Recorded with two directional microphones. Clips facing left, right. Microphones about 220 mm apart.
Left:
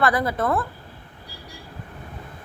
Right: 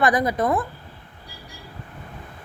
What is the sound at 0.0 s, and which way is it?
Speech, 20° right (ahead or behind).